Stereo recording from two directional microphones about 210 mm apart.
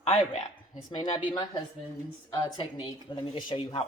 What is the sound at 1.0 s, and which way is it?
Speech, 20° left (ahead or behind).